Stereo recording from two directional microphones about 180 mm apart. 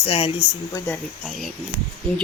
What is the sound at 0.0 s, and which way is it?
Speech, 30° left (ahead or behind).